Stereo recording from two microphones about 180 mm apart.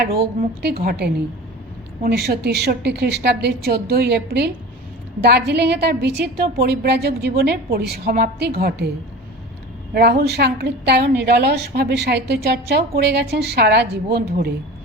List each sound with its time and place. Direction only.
0.0 s a woman's voice: 60° right (ahead or behind)
9.9 s a woman's voice: 65° right (ahead or behind)